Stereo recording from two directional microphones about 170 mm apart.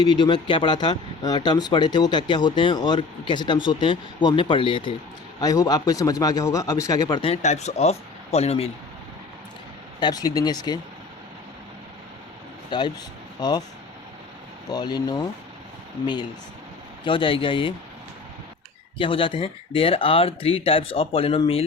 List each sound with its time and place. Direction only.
0.0 s speech: 25° left (ahead or behind)
7.4 s speech: 40° left (ahead or behind)
10.0 s speech: 25° left (ahead or behind)
12.7 s speech: 25° left (ahead or behind)
14.7 s speech: 25° left (ahead or behind)
17.0 s speech: 30° left (ahead or behind)
18.9 s speech: 30° left (ahead or behind)